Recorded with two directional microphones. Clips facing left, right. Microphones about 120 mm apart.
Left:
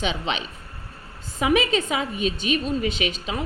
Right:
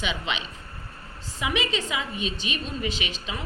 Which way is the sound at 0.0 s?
35° left (ahead or behind).